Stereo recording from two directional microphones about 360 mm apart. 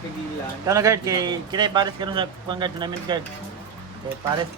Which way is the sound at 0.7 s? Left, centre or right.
Centre.